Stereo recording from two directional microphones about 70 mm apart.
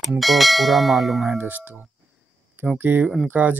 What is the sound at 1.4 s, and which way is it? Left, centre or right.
Speech, right.